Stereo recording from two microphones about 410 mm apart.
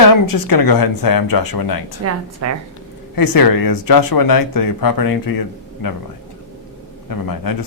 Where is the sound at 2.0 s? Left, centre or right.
Right.